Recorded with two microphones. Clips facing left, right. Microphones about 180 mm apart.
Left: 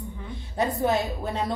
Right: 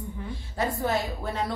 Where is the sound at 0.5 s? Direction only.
20° left (ahead or behind).